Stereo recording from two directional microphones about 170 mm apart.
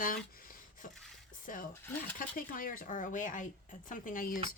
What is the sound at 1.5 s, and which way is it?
Speech, 50° left (ahead or behind).